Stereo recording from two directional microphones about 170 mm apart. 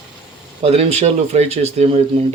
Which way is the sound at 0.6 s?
35° right (ahead or behind).